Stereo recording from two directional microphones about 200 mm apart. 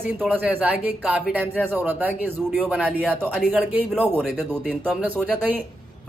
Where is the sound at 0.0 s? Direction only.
10° right (ahead or behind).